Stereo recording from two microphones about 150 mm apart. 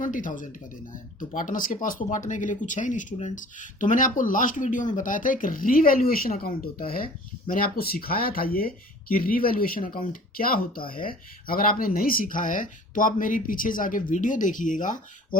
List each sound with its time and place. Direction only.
0.0 s speech: 60° left (ahead or behind)